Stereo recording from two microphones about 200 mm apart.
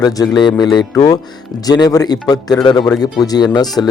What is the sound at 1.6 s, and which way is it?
Speech, 20° left (ahead or behind).